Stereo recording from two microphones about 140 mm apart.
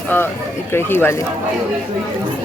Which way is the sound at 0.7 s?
15° left (ahead or behind).